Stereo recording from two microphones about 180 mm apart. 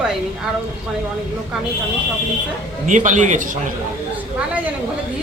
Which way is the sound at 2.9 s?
45° right (ahead or behind).